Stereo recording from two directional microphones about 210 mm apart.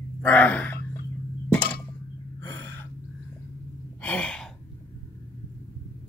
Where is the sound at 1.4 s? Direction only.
5° left (ahead or behind).